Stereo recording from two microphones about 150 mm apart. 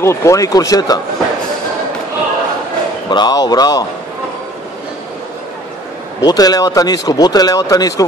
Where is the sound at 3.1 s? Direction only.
30° left (ahead or behind).